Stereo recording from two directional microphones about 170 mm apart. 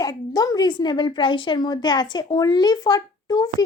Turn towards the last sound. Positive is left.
turn(degrees=20)  # may be behind; listen again after turning